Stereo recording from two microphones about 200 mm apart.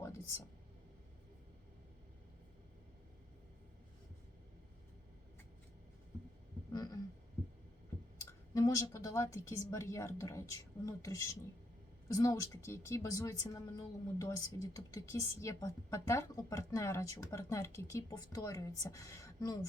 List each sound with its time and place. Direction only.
6.7 s heart sounds: 20° left (ahead or behind)
8.2 s speech: 15° left (ahead or behind)